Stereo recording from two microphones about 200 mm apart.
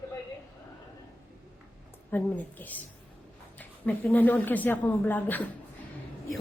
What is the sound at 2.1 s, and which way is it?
A woman's voice, 10° left (ahead or behind).